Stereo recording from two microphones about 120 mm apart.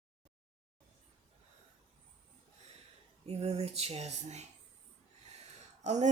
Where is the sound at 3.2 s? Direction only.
60° right (ahead or behind).